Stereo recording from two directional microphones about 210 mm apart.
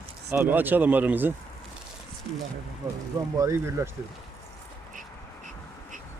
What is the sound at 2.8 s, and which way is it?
Speech, 15° right (ahead or behind).